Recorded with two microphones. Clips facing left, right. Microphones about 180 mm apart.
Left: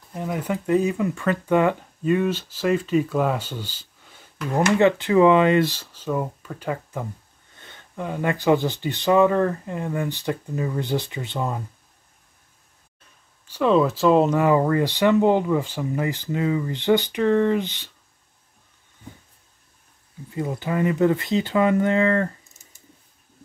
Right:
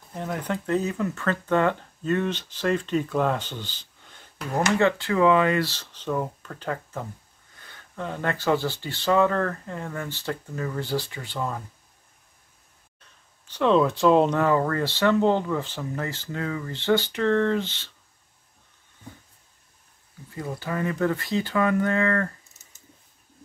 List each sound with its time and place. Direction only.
0.1 s speech: 5° left (ahead or behind)
4.6 s speech: 20° left (ahead or behind)
5.8 s speech: 10° left (ahead or behind)
7.5 s a sound: 25° left (ahead or behind)
8.0 s speech: 10° left (ahead or behind)
13.5 s speech: 5° left (ahead or behind)
20.3 s speech: 20° left (ahead or behind)